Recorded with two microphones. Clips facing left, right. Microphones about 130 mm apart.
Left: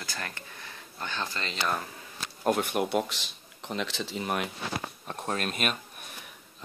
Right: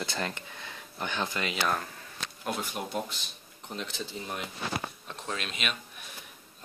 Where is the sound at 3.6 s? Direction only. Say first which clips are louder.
Left 4 dB; 90° left; by 4.5 s 75° left (ahead or behind).